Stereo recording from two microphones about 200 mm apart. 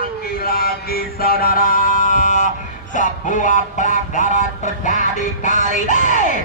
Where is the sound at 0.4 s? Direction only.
50° left (ahead or behind).